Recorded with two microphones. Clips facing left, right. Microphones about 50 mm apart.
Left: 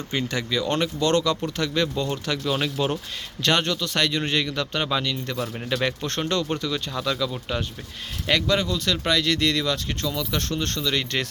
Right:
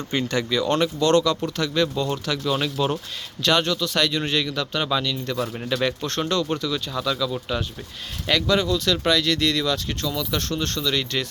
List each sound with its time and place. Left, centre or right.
0.1 s speech: centre
0.7 s speech: centre
3.4 s speech: left
8.3 s speech: left